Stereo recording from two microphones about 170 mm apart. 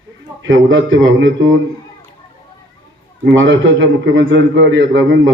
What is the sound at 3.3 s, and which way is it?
A man's voice, 90° right.